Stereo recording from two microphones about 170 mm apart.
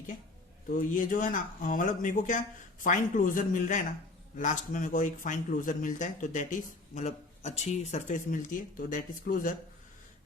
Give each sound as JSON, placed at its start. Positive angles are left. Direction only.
{"t": 0.8, "sound": "speech", "side_deg": 50}